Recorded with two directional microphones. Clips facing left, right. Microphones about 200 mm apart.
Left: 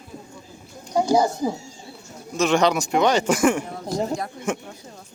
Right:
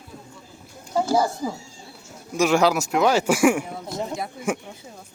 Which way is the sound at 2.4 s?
5° right (ahead or behind).